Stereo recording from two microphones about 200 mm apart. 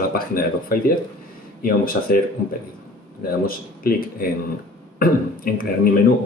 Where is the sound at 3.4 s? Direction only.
45° left (ahead or behind).